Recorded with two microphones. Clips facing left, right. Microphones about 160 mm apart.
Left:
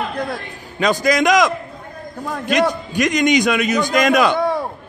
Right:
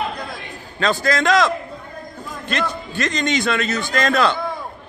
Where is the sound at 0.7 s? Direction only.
15° left (ahead or behind).